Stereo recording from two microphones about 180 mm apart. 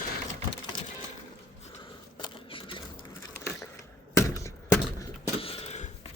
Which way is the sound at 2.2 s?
30° left (ahead or behind).